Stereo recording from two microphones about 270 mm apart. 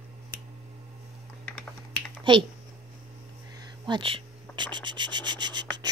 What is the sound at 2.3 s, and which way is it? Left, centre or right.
Speech, centre.